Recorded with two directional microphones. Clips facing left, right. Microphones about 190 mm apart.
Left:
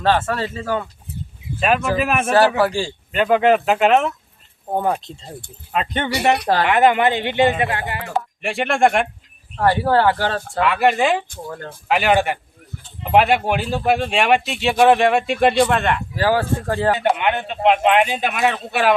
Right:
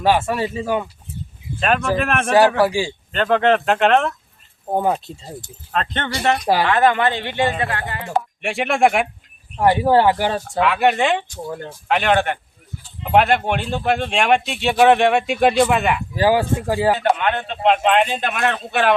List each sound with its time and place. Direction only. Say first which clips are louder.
0.0 s speech: right 1 dB; 10° right (ahead or behind)
1.5 s speech: left 1 dB; 5° left (ahead or behind)
2.6 s speech: right 1 dB; 10° right (ahead or behind)
3.1 s speech: left 2 dB; 10° left (ahead or behind)
4.7 s speech: right 1 dB; 10° right (ahead or behind)
5.7 s speech: left 2 dB; 10° left (ahead or behind)
8.4 s speech: even; centre (ahead or behind)
9.6 s speech: right 2 dB; 15° right (ahead or behind)
10.6 s speech: even; centre (ahead or behind)
11.4 s speech: right 2 dB; 15° right (ahead or behind)
11.9 s speech: left 1 dB; 5° left (ahead or behind)
17.0 s speech: even; 15° left (ahead or behind)